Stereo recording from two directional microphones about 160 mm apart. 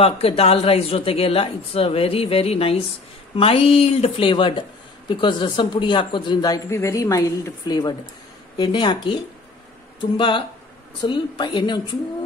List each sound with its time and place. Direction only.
0.0 s speech: 35° left (ahead or behind)